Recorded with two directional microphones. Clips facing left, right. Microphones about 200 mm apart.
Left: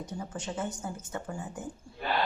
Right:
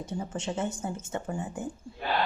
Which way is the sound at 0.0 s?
25° right (ahead or behind).